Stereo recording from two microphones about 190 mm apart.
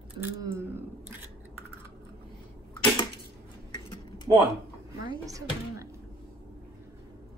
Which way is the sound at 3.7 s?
20° left (ahead or behind).